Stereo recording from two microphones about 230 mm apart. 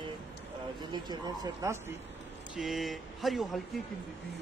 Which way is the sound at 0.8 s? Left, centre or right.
Centre.